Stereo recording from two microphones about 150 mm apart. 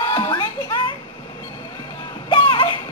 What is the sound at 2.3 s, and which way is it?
Music, 35° left (ahead or behind).